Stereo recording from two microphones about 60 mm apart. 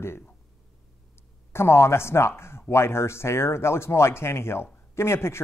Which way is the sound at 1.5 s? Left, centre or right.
Left.